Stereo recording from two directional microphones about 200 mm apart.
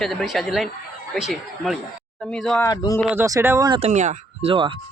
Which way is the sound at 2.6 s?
20° left (ahead or behind).